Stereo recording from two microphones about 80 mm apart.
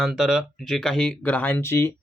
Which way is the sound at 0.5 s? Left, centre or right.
Centre.